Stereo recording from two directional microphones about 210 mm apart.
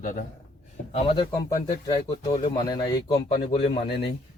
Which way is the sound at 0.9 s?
30° left (ahead or behind).